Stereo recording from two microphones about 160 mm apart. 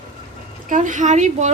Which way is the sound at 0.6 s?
50° right (ahead or behind).